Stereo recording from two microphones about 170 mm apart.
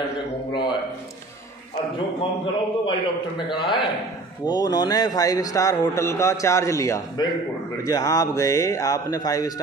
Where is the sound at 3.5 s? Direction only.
30° left (ahead or behind).